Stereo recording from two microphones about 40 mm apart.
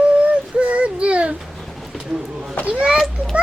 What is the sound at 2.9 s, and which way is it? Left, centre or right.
Children playing, centre.